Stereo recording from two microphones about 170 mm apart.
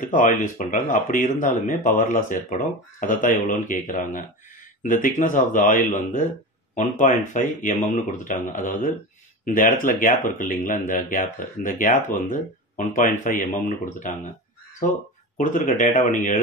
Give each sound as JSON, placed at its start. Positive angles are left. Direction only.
{"t": 0.0, "sound": "speech", "side_deg": 50}